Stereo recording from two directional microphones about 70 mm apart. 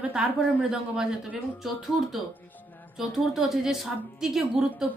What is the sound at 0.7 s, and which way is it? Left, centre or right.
Speech, centre.